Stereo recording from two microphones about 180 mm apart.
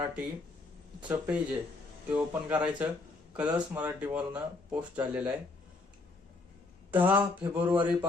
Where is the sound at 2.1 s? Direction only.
10° right (ahead or behind).